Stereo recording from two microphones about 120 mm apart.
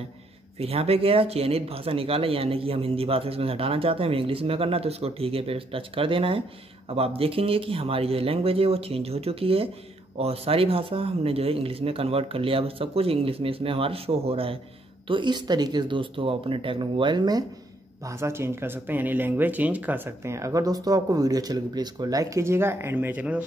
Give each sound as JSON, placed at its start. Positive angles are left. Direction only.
{"t": 0.6, "sound": "speech", "side_deg": -55}
{"t": 15.0, "sound": "speech", "side_deg": -40}
{"t": 18.0, "sound": "speech", "side_deg": -20}